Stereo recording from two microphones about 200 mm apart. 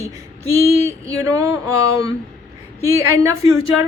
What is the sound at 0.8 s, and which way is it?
A woman's voice, 15° right (ahead or behind).